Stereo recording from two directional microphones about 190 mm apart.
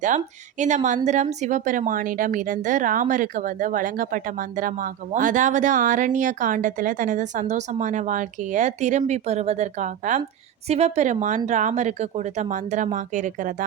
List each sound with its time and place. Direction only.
0.6 s a woman's voice: 40° right (ahead or behind)